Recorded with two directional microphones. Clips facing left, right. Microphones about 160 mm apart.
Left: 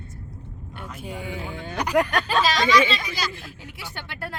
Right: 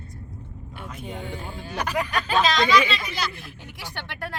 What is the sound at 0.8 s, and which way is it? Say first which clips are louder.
Speech: even; centre (ahead or behind).